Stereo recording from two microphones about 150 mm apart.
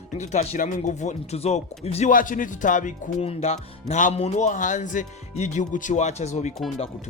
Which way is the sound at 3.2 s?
45° left (ahead or behind).